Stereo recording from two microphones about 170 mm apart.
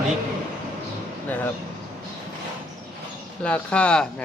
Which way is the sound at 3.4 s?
5° left (ahead or behind).